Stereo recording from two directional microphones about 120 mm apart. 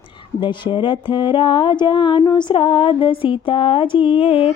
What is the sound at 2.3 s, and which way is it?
Speech, 45° left (ahead or behind).